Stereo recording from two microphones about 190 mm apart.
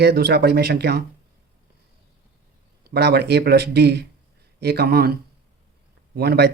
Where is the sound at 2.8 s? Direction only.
60° right (ahead or behind).